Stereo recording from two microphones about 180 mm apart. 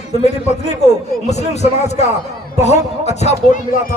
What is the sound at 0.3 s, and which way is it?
A man's voice, 40° left (ahead or behind).